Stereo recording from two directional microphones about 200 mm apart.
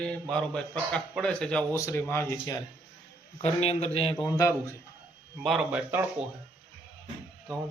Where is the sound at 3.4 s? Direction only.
30° left (ahead or behind).